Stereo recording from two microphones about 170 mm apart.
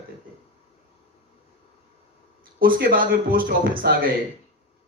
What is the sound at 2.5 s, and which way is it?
A man's voice, 60° right (ahead or behind).